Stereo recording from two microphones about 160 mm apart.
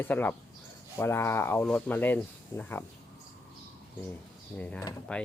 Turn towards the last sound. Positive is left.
turn(degrees=10)  # may be behind; listen again after turning